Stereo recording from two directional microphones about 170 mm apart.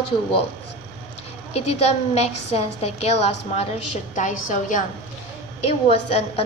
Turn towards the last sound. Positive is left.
turn(degrees=35)  # may be behind; listen again after turning